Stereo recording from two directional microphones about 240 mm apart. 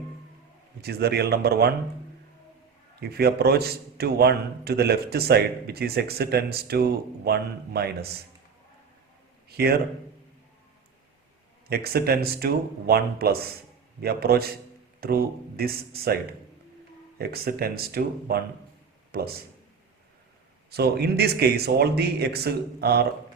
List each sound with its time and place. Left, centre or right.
0.8 s a man's voice: right
3.0 s a man's voice: right
9.5 s a man's voice: right
11.7 s a man's voice: right
20.7 s speech: right